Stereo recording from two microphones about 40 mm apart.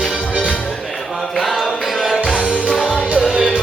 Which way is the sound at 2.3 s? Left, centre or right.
Right.